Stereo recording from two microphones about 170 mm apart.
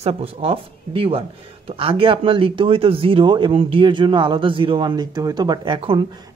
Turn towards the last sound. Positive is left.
turn(degrees=-25)  # may be behind; listen again after turning